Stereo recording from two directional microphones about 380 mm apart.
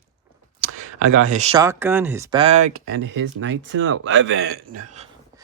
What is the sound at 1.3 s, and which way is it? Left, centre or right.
Speech, centre.